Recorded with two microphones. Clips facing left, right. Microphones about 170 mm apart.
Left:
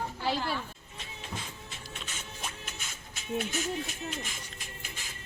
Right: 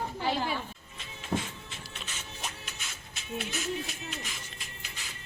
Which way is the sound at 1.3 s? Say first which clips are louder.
Right 10 dB; 50° right (ahead or behind).